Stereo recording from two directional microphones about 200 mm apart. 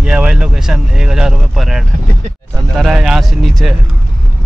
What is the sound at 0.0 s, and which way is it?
Speech, 5° right (ahead or behind).